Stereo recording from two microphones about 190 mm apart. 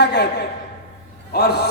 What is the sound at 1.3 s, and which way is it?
Speech, 60° left (ahead or behind).